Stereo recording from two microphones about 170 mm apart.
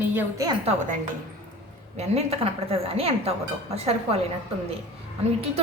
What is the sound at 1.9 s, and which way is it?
A woman's voice, 40° right (ahead or behind).